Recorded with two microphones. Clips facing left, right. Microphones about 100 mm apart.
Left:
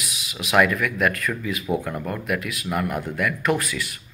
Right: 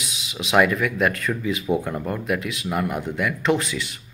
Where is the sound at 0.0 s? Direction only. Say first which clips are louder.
Right 1 dB; 25° right (ahead or behind).